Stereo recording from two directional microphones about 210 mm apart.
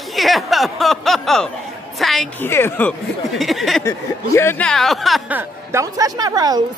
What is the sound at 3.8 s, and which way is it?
Speech, 10° left (ahead or behind).